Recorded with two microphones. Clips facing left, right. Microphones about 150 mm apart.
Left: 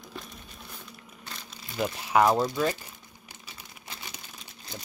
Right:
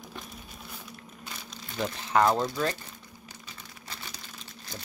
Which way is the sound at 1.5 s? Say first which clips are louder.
Left 2 dB; 10° left (ahead or behind).